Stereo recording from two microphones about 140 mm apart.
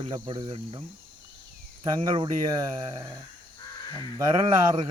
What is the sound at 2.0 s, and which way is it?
Speech, 40° right (ahead or behind).